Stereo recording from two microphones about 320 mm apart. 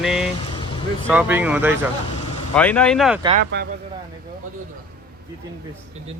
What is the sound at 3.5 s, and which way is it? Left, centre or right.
Speech, right.